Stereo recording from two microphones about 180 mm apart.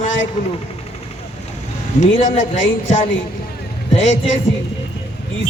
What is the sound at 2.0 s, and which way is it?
Speech, 45° left (ahead or behind).